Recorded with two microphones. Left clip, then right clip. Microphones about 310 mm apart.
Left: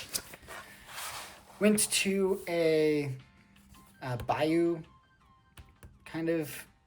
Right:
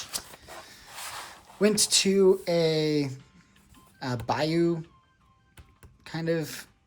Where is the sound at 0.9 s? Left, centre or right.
Centre.